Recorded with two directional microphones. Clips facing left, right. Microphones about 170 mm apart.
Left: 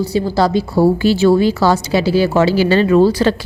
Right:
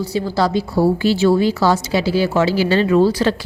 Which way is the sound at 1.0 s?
55° left (ahead or behind).